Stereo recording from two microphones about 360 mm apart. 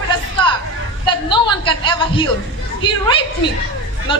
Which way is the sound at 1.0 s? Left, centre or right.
Centre.